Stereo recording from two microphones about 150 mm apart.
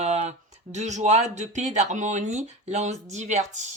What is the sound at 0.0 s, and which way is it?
Speech, 50° right (ahead or behind).